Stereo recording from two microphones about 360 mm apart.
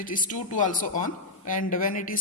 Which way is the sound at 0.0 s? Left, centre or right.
Left.